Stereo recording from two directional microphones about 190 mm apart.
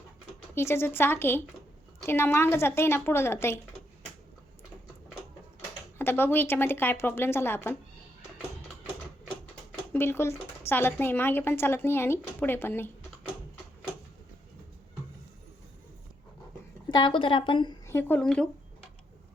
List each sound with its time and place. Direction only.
0.5 s speech: 10° left (ahead or behind)
6.0 s speech: 10° left (ahead or behind)
9.9 s speech: 10° left (ahead or behind)
16.9 s a woman's voice: 25° left (ahead or behind)
17.8 s speech: 10° left (ahead or behind)